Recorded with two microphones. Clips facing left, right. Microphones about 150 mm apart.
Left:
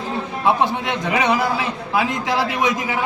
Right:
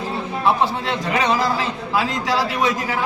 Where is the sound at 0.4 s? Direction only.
20° left (ahead or behind).